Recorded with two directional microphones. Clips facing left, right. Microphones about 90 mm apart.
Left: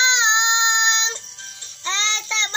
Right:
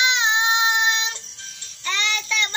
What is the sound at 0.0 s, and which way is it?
Child singing, 25° left (ahead or behind).